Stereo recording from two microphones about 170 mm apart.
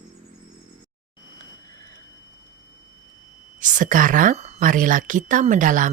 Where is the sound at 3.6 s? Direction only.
50° right (ahead or behind).